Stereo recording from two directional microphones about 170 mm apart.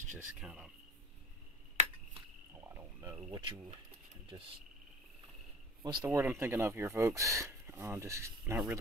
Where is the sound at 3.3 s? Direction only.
30° right (ahead or behind).